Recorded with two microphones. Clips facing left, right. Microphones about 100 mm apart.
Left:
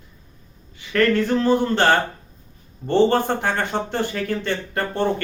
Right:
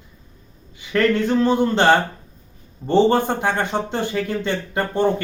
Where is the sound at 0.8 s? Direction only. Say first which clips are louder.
Even; 20° right (ahead or behind).